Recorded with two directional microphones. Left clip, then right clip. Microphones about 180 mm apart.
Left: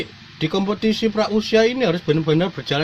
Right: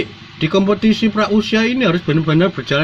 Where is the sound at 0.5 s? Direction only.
55° left (ahead or behind).